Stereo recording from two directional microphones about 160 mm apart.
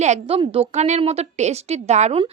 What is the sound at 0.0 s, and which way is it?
A woman's voice, 45° right (ahead or behind).